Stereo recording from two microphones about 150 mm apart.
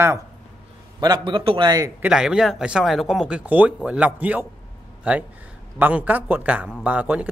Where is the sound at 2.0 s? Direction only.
5° right (ahead or behind).